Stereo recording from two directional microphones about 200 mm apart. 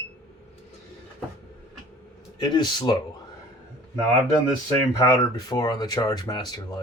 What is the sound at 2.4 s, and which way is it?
Speech, 20° left (ahead or behind).